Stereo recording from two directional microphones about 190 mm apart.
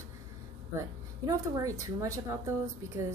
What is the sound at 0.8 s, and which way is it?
Speech, 15° right (ahead or behind).